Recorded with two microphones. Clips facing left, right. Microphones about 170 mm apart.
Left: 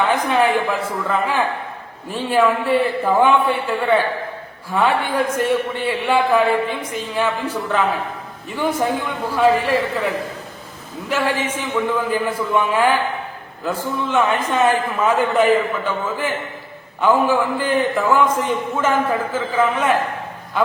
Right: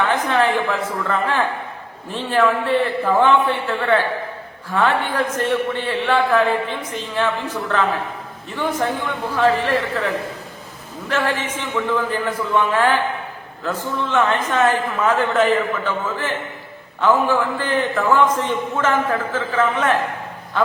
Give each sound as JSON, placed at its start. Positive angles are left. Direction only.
{"t": 0.3, "sound": "a man's voice", "side_deg": 15}
{"t": 11.1, "sound": "a man's voice", "side_deg": 10}